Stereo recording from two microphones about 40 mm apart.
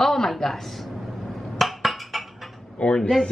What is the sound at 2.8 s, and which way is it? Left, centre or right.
Speech, left.